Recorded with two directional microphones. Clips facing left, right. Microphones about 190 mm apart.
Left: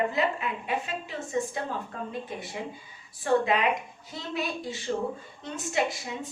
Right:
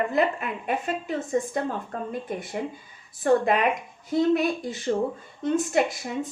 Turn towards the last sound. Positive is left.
turn(degrees=-50)  # may be behind; listen again after turning